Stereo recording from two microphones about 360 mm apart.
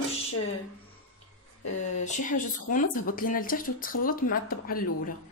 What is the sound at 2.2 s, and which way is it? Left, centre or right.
Speech, left.